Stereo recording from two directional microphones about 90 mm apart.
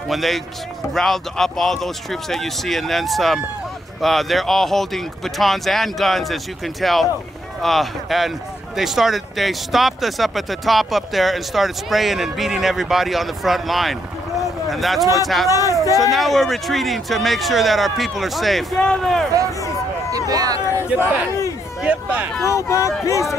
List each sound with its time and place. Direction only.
0.1 s speech: centre (ahead or behind)
20.1 s a sound: 40° right (ahead or behind)
21.0 s speech: 35° left (ahead or behind)
21.8 s speech: 15° right (ahead or behind)
22.4 s speech: 35° left (ahead or behind)